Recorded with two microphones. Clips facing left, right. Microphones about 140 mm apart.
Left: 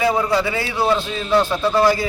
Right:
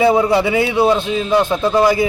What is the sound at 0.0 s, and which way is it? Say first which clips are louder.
A man's voice: right 5 dB; 20° right (ahead or behind).